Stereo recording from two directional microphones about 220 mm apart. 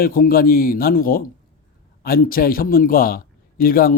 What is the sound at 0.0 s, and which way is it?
Speech, 40° left (ahead or behind).